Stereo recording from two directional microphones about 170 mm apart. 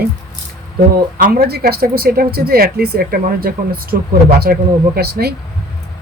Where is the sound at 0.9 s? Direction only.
65° right (ahead or behind).